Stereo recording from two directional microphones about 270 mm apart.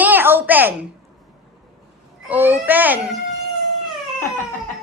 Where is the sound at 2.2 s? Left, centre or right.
Centre.